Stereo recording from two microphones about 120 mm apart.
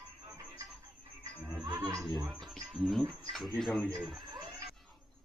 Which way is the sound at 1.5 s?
15° right (ahead or behind).